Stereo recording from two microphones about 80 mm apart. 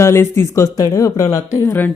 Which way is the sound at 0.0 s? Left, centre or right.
Left.